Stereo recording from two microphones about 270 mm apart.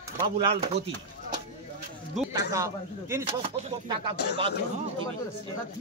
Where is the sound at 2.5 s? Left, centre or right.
Centre.